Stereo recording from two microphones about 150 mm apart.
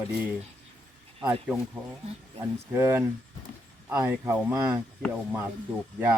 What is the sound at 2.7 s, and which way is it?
Speech, 15° right (ahead or behind).